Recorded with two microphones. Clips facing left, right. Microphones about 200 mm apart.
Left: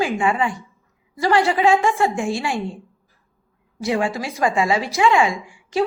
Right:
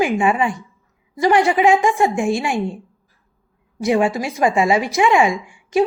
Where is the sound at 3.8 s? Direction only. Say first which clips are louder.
Right 4 dB; 20° right (ahead or behind).